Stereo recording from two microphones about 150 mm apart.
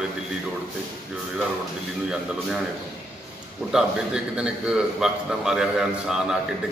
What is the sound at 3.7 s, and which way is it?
A man's voice, 5° right (ahead or behind).